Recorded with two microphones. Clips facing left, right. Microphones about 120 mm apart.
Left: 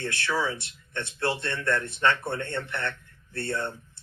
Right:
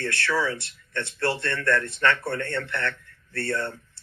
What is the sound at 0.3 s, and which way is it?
Speech, 20° left (ahead or behind).